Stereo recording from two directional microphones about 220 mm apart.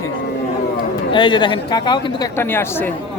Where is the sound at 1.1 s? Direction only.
20° left (ahead or behind).